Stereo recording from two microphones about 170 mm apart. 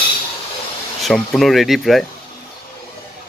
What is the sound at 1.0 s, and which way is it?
Speech, centre (ahead or behind).